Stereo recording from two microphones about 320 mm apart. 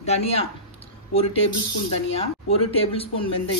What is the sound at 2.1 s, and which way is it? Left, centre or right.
Speech, centre.